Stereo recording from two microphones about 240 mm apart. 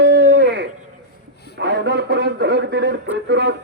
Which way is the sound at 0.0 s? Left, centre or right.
Right.